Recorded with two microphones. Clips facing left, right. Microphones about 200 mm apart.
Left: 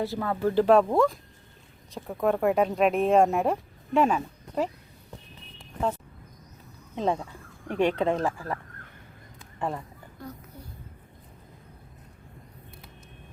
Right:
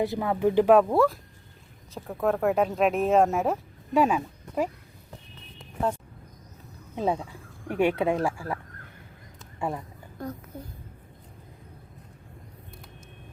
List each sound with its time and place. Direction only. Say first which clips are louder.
0.0 s speech: right 3 dB; 15° right (ahead or behind)
6.9 s speech: even; 5° right (ahead or behind)
9.6 s speech: even; 10° right (ahead or behind)